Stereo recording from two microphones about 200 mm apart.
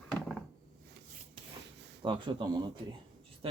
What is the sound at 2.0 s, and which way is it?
Speech, 25° right (ahead or behind).